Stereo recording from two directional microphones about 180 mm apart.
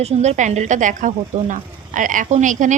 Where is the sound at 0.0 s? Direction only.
40° right (ahead or behind).